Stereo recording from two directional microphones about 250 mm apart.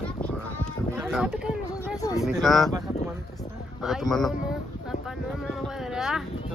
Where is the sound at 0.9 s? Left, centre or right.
Centre.